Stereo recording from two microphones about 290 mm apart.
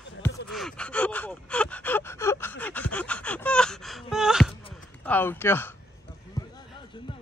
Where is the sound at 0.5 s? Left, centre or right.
Centre.